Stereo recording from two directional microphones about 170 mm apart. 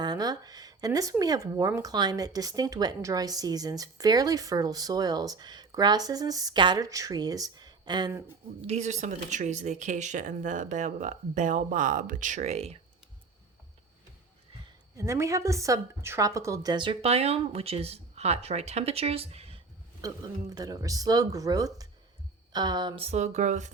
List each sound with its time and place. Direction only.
0.0 s speech: 25° right (ahead or behind)
8.6 s speech: 40° right (ahead or behind)
14.9 s a woman's voice: 15° right (ahead or behind); by 19.6 s 35° right (ahead or behind)
20.0 s speech: 20° right (ahead or behind)
23.0 s speech: 45° right (ahead or behind)